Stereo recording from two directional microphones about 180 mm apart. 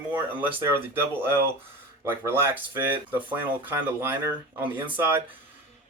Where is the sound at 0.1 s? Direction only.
10° right (ahead or behind).